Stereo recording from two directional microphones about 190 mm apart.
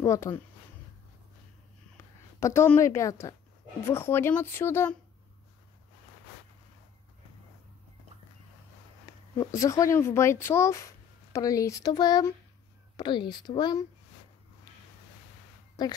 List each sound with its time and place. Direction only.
0.0 s speech: 15° left (ahead or behind)
2.4 s speech: 15° left (ahead or behind)
9.4 s speech: 15° left (ahead or behind)
15.8 s speech: 20° left (ahead or behind)